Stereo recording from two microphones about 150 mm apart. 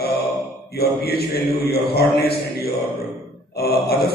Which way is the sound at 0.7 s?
90° left.